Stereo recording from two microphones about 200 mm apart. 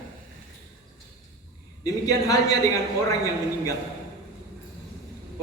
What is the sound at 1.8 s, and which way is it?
Speech, 20° left (ahead or behind).